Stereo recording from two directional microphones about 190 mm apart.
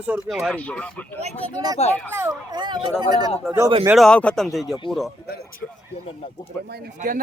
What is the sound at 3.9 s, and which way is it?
Speech, centre (ahead or behind).